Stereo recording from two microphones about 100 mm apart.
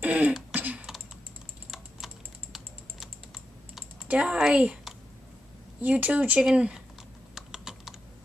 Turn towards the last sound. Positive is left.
turn(degrees=-5)  # may be behind; listen again after turning